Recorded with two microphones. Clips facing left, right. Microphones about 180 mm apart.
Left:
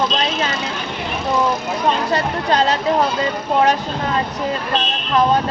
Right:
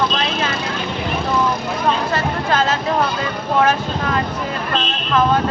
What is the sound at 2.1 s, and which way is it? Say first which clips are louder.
Speech: left 1 dB; 35° left (ahead or behind).